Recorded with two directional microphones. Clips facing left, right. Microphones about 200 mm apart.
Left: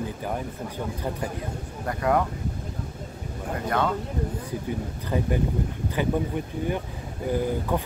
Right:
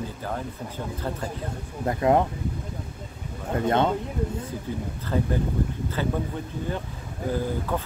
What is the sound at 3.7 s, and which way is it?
Speech, 25° right (ahead or behind).